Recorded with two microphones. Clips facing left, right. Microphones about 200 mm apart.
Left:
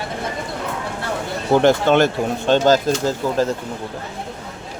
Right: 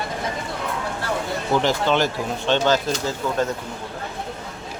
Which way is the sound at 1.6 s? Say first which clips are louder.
Left 8 dB; 55° left (ahead or behind).